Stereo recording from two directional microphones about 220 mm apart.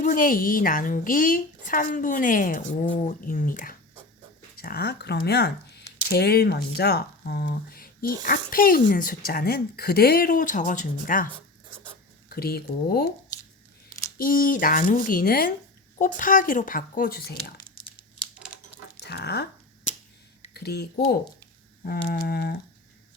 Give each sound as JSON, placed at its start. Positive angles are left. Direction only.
{"t": 0.0, "sound": "a woman's voice", "side_deg": 40}
{"t": 12.3, "sound": "speech", "side_deg": 45}
{"t": 14.2, "sound": "a woman's voice", "side_deg": 40}
{"t": 18.3, "sound": "a sound", "side_deg": -5}
{"t": 19.0, "sound": "dog", "side_deg": 50}
{"t": 19.9, "sound": "finger snapping", "side_deg": 35}
{"t": 20.5, "sound": "speech", "side_deg": 45}